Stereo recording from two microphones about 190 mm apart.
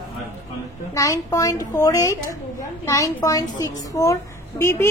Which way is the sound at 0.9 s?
15° left (ahead or behind).